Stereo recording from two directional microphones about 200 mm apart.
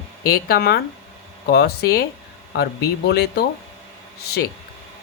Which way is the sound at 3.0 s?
55° left (ahead or behind).